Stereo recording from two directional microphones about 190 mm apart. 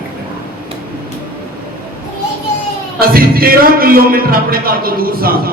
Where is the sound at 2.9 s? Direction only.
50° right (ahead or behind).